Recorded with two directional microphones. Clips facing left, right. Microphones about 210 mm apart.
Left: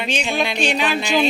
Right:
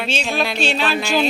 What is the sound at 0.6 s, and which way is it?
Music, 15° left (ahead or behind).